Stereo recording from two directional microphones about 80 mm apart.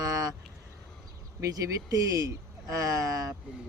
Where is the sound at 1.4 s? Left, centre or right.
Right.